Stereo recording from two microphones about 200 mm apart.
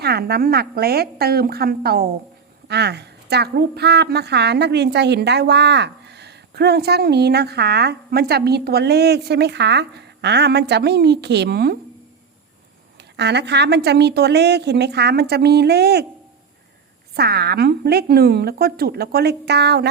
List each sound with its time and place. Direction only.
0.0 s a woman's voice: 50° right (ahead or behind)
13.1 s a woman's voice: 60° right (ahead or behind)
17.2 s a woman's voice: 55° right (ahead or behind)